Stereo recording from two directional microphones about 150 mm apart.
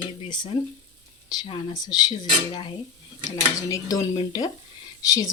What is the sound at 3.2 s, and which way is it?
Speech, 20° left (ahead or behind).